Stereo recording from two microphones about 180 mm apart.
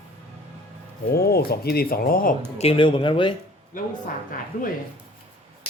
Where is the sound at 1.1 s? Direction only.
60° left (ahead or behind).